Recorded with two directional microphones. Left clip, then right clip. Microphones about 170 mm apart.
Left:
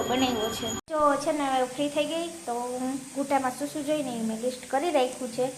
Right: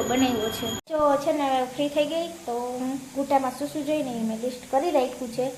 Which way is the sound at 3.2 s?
5° right (ahead or behind).